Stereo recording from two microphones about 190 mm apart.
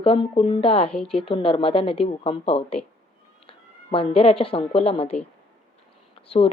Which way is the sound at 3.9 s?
30° left (ahead or behind).